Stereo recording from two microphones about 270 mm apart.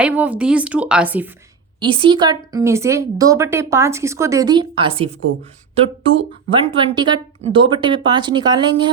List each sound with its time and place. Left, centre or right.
0.0 s a woman's voice: centre
1.8 s a woman's voice: centre
6.5 s a woman's voice: centre